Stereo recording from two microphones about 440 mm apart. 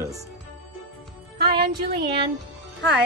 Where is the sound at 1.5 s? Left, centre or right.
Right.